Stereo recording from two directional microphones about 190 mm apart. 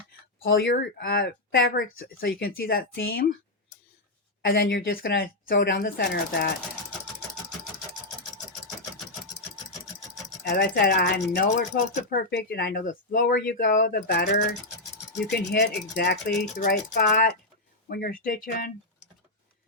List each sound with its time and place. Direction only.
0.4 s speech: 70° left (ahead or behind)
0.7 s speech: 55° left (ahead or behind)
4.4 s speech: 55° left (ahead or behind)
10.6 s speech: 60° left (ahead or behind)